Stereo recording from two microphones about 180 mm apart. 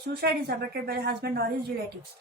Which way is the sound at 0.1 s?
60° right (ahead or behind).